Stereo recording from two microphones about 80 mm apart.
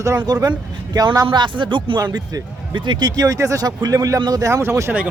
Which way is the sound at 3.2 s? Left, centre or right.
Right.